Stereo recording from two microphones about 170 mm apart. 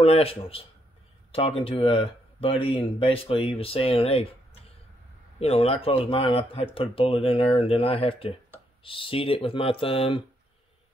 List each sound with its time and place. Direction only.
0.0 s speech: 35° left (ahead or behind)
5.4 s speech: 35° left (ahead or behind)